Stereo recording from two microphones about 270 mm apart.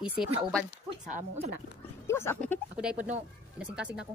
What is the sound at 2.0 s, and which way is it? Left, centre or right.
Speech, centre.